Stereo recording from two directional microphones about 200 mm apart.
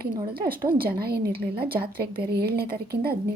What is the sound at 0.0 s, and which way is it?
A woman's voice, 50° right (ahead or behind).